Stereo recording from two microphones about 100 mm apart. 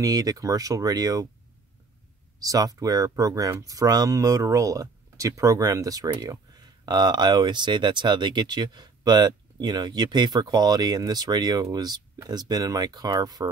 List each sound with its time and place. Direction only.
0.0 s speech: 40° right (ahead or behind)
2.4 s speech: 35° right (ahead or behind)